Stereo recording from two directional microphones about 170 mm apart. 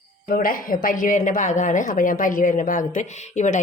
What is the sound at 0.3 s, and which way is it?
A woman's voice, 55° left (ahead or behind).